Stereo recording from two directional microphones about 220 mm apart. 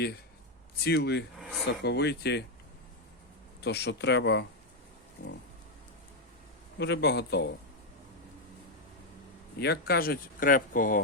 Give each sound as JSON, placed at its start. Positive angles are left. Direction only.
{"t": 0.9, "sound": "speech", "side_deg": 50}
{"t": 1.4, "sound": "a sound", "side_deg": 0}
{"t": 1.6, "sound": "speech", "side_deg": 50}
{"t": 3.6, "sound": "speech", "side_deg": 50}
{"t": 6.7, "sound": "speech", "side_deg": 50}
{"t": 9.6, "sound": "speech", "side_deg": 45}